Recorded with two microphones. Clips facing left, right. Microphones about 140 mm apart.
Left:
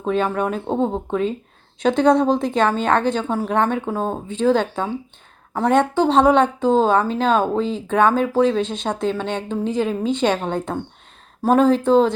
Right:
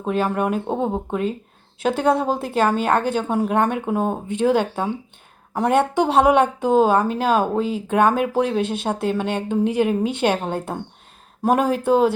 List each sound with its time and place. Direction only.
0.0 s speech: 5° right (ahead or behind)